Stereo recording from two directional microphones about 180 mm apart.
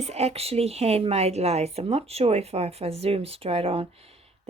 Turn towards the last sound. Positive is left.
turn(degrees=-35)  # may be behind; listen again after turning